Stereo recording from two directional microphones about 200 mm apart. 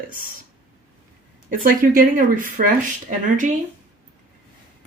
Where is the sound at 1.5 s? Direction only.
45° right (ahead or behind).